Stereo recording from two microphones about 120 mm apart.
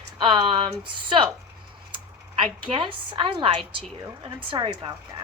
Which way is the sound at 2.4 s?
45° right (ahead or behind).